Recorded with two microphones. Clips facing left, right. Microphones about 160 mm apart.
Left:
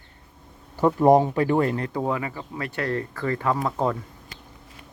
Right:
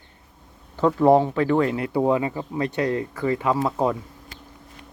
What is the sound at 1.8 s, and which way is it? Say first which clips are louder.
Speech: right 5 dB; 10° right (ahead or behind).